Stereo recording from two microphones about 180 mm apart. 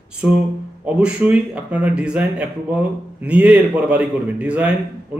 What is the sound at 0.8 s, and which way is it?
Speech, 5° right (ahead or behind).